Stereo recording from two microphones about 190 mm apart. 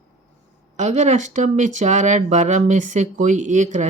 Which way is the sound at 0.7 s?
40° right (ahead or behind).